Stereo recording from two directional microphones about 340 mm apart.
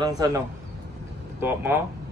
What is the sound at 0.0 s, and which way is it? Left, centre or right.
Speech, centre.